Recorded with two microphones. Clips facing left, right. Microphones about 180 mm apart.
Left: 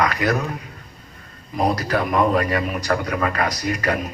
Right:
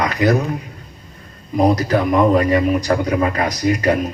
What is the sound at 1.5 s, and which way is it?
A man's voice, 20° right (ahead or behind).